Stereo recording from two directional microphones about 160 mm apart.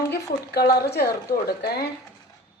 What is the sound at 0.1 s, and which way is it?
Speech, 85° left.